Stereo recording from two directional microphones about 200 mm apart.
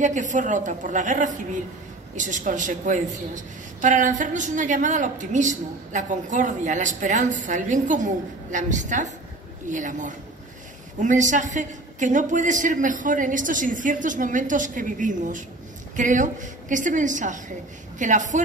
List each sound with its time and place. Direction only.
0.0 s a man's voice: 40° right (ahead or behind)